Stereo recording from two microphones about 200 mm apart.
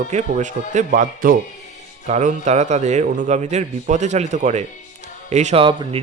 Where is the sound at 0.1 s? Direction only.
35° right (ahead or behind).